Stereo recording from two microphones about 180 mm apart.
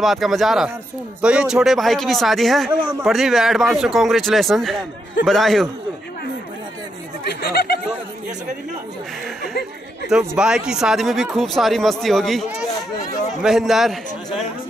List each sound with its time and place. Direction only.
0.0 s speech: centre (ahead or behind)
7.2 s a sound: 60° left (ahead or behind)
10.0 s speech: 5° right (ahead or behind)